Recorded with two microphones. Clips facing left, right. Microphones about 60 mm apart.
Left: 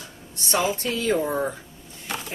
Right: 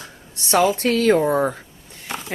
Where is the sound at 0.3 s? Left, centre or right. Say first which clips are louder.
Right 6 dB; right.